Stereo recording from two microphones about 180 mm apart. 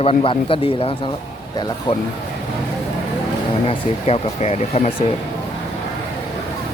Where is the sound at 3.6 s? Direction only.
35° left (ahead or behind).